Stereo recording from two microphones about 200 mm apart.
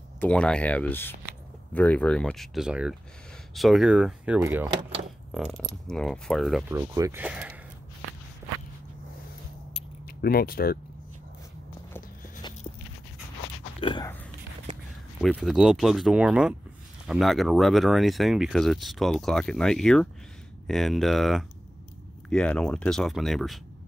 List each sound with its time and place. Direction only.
0.2 s speech: 5° left (ahead or behind); by 4.6 s 10° right (ahead or behind)
5.9 s speech: 5° left (ahead or behind)
6.7 s speech: 15° right (ahead or behind)
10.0 s speech: 50° left (ahead or behind)
11.9 s walk: 20° left (ahead or behind)
13.7 s speech: 25° left (ahead or behind)
15.2 s speech: centre (ahead or behind)